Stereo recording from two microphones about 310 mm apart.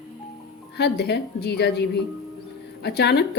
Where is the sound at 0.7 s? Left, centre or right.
Left.